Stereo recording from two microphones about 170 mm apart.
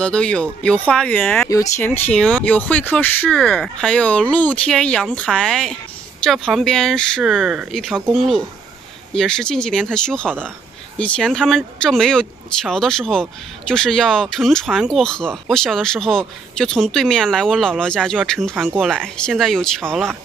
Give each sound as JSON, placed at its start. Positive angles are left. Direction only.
{"t": 0.0, "sound": "speech", "side_deg": 5}
{"t": 1.5, "sound": "speech", "side_deg": 20}
{"t": 1.9, "sound": "speech", "side_deg": 5}